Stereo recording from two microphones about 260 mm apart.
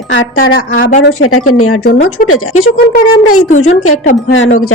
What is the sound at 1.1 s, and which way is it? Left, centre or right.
Speech, left.